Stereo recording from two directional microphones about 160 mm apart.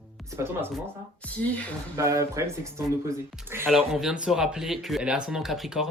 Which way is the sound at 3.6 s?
Centre (ahead or behind).